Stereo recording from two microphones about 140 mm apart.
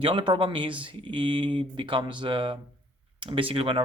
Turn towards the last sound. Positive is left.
turn(degrees=-40)  # may be behind; listen again after turning